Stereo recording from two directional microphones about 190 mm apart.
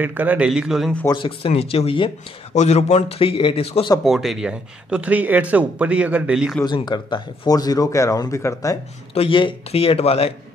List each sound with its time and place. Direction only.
0.0 s speech: 10° right (ahead or behind)
1.0 s a man's voice: 25° left (ahead or behind)
4.0 s speech: centre (ahead or behind)
6.6 s speech: 20° left (ahead or behind)
9.1 s a man's voice: 30° left (ahead or behind)